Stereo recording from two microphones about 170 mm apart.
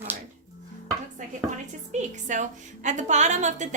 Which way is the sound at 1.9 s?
45° right (ahead or behind).